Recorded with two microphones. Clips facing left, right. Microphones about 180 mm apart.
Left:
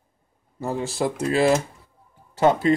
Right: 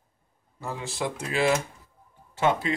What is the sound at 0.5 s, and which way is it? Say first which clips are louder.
Speech: left 7 dB; 40° left (ahead or behind).